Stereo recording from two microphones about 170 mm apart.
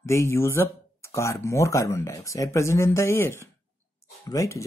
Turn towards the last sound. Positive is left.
turn(degrees=20)  # may be behind; listen again after turning